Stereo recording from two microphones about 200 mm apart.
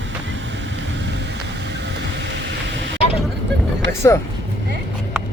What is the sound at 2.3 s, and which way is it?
Vehicle, 65° right (ahead or behind).